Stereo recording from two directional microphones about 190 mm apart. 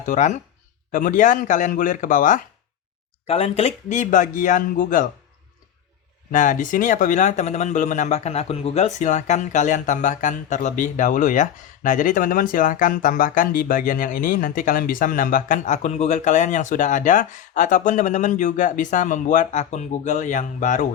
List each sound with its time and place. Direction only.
0.0 s a man's voice: 40° left (ahead or behind)
3.2 s speech: 30° left (ahead or behind)
6.3 s speech: 40° left (ahead or behind)